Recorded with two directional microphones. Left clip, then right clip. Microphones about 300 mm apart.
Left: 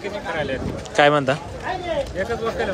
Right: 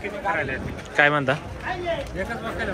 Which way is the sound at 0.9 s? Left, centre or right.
Centre.